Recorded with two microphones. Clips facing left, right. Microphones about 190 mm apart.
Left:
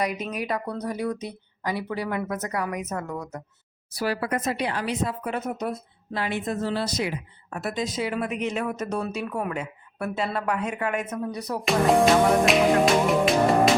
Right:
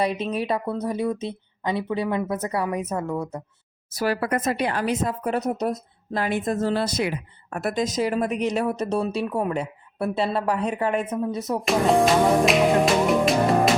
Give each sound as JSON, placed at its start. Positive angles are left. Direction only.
{"t": 0.0, "sound": "speech", "side_deg": -30}
{"t": 3.9, "sound": "speech", "side_deg": -50}
{"t": 11.6, "sound": "music", "side_deg": 0}